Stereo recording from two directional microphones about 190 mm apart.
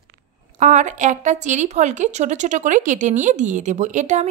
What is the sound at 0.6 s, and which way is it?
Speech, 40° right (ahead or behind).